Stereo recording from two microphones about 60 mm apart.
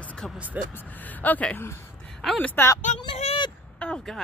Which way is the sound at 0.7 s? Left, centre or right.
Left.